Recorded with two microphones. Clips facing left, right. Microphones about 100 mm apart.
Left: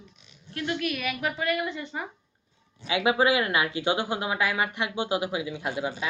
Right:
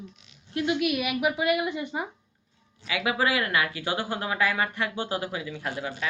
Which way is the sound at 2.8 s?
25° left (ahead or behind).